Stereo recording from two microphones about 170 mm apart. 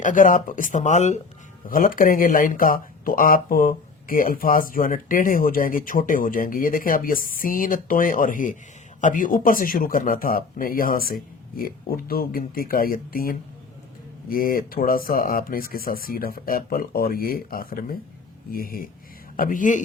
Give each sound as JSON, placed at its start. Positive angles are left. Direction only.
{"t": 0.0, "sound": "speech", "side_deg": 50}
{"t": 1.6, "sound": "speech", "side_deg": 55}